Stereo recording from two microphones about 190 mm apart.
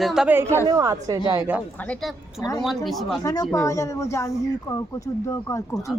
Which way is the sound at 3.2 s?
20° left (ahead or behind).